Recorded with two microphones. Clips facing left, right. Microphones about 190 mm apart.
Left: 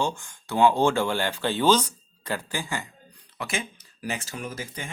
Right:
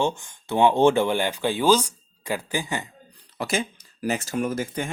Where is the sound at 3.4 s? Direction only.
35° right (ahead or behind); by 4.9 s 50° right (ahead or behind).